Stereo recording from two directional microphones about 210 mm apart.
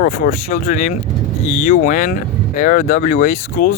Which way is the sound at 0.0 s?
40° left (ahead or behind).